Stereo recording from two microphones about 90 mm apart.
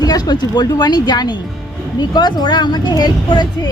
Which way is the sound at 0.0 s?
45° left (ahead or behind).